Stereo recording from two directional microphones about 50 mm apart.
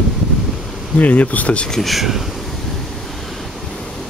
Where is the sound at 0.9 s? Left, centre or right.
Left.